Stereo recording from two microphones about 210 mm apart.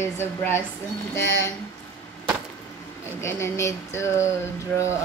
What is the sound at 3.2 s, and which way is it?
Speech, 15° left (ahead or behind).